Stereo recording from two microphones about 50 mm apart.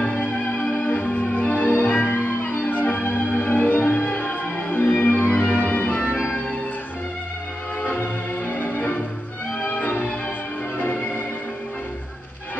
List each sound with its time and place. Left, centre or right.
0.1 s music: left
1.7 s music: left
7.8 s music: left